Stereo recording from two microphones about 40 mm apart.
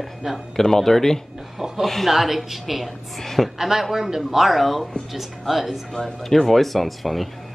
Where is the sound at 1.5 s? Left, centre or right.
Centre.